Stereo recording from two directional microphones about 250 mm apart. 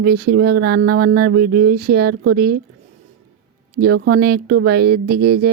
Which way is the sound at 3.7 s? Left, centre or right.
Right.